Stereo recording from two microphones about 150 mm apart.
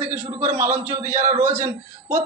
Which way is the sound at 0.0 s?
10° right (ahead or behind).